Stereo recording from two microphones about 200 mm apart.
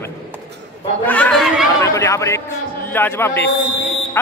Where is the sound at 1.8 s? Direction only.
15° left (ahead or behind).